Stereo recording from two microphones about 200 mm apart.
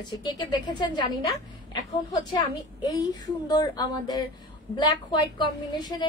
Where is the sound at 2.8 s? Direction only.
20° left (ahead or behind).